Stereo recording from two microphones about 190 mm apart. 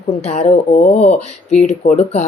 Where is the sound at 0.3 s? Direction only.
35° left (ahead or behind).